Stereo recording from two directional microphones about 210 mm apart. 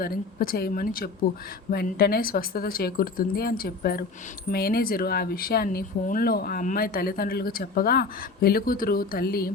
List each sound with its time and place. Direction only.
0.0 s speech: 45° left (ahead or behind)